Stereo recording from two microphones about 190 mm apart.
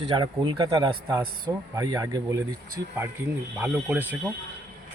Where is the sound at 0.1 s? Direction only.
20° right (ahead or behind).